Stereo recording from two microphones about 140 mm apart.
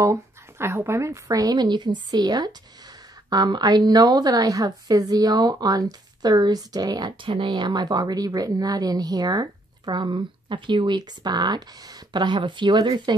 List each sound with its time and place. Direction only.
0.0 s a woman's voice: 20° right (ahead or behind)